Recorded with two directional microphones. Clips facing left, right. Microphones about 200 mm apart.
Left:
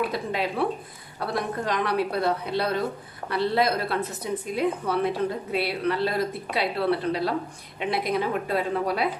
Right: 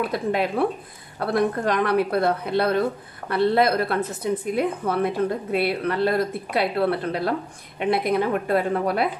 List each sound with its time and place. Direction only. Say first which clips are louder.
0.1 s a woman's voice: right 5 dB; 55° right (ahead or behind)